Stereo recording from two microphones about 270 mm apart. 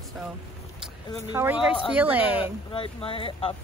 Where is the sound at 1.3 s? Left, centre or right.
Centre.